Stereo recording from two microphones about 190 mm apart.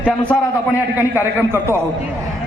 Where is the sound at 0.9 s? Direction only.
10° right (ahead or behind).